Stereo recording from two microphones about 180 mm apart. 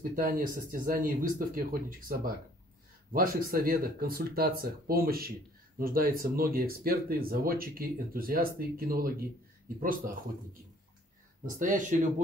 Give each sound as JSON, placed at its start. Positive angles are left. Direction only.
{"t": 0.0, "sound": "speech", "side_deg": -50}
{"t": 11.4, "sound": "speech", "side_deg": -45}